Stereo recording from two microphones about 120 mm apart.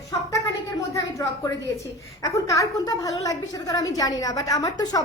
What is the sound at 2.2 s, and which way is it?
A woman's voice, 30° left (ahead or behind).